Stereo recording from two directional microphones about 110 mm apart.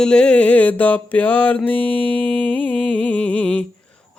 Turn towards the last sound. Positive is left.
turn(degrees=10)  # may be behind; listen again after turning